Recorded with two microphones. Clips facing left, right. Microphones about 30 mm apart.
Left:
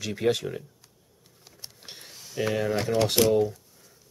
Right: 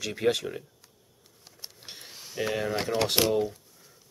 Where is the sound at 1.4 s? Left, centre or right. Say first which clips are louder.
Even; centre.